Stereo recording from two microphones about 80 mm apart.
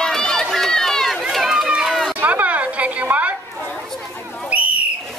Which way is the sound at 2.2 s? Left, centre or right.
Centre.